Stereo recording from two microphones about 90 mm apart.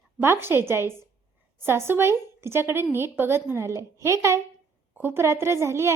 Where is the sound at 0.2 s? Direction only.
25° right (ahead or behind).